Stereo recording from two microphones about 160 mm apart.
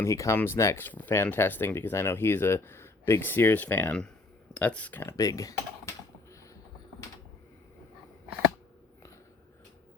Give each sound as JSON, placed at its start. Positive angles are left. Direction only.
{"t": 0.0, "sound": "speech", "side_deg": 20}